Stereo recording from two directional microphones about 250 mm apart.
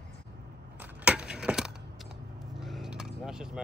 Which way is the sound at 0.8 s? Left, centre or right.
Centre.